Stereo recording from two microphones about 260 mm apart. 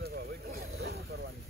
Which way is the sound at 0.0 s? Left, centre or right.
Right.